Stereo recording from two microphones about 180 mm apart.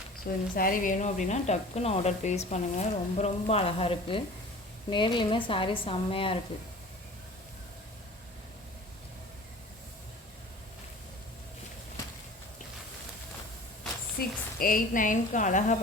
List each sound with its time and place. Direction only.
0.3 s speech: 50° left (ahead or behind); by 6.4 s 30° left (ahead or behind)
14.2 s a woman's voice: 50° left (ahead or behind)